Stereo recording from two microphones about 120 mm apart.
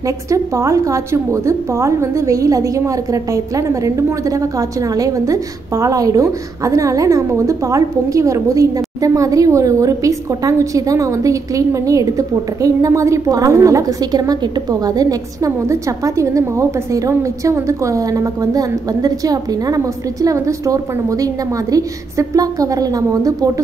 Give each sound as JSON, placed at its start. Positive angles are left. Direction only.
{"t": 0.0, "sound": "a woman's voice", "side_deg": -25}